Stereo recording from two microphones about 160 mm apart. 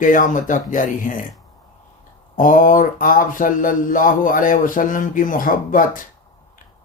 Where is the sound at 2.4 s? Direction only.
55° left (ahead or behind).